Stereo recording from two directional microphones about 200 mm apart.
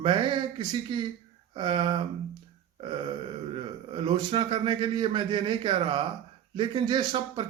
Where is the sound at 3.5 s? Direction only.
25° right (ahead or behind).